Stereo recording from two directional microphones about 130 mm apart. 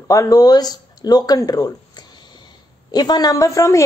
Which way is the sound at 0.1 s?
25° left (ahead or behind).